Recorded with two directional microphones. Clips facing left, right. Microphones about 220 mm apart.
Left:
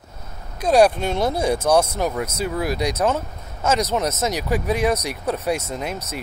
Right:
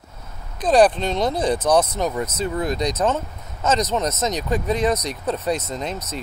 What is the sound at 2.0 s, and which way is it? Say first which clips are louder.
Speech: even; 5° left (ahead or behind).